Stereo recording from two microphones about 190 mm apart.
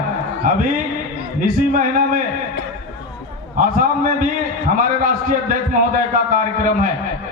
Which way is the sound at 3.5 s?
45° right (ahead or behind).